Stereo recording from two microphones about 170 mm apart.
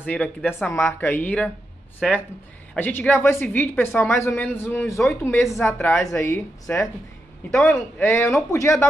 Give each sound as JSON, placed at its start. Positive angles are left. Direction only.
{"t": 0.0, "sound": "speech", "side_deg": 10}
{"t": 8.0, "sound": "speech", "side_deg": 15}